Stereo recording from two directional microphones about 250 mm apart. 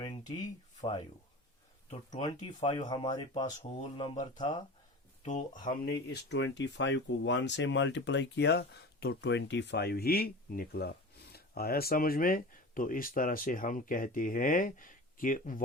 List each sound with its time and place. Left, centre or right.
0.0 s a sound: centre
0.8 s speech: centre
2.6 s speech: left
5.2 s speech: left
5.6 s speech: left